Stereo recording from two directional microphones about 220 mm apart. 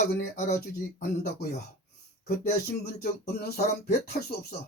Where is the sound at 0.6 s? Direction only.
45° left (ahead or behind).